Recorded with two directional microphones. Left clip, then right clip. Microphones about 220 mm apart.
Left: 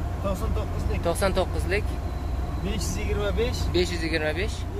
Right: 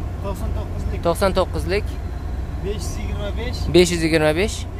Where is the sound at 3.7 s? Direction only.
35° right (ahead or behind).